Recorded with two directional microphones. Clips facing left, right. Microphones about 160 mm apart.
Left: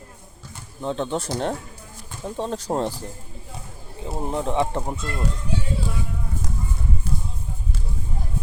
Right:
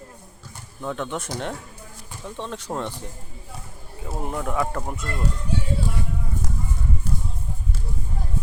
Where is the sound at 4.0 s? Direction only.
25° left (ahead or behind).